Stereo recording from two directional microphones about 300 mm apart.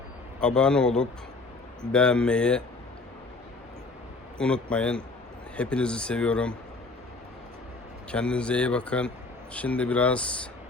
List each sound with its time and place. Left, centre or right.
0.3 s speech: centre
4.4 s speech: centre
8.1 s speech: centre